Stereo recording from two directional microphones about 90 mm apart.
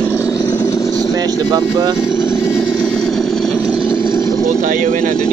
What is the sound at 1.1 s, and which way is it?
Speech, 45° right (ahead or behind).